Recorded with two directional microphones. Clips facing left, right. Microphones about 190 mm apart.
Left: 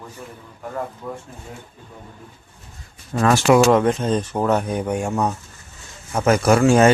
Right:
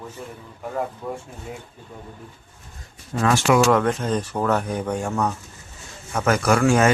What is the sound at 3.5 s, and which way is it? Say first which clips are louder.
Speech: left 3 dB; 20° left (ahead or behind).